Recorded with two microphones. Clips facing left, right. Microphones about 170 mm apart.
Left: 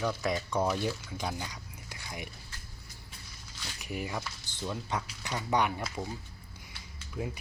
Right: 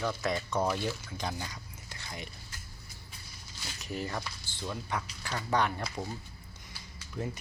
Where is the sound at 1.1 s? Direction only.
10° left (ahead or behind).